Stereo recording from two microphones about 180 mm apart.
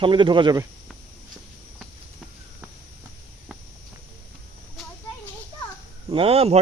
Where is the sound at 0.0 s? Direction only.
25° right (ahead or behind).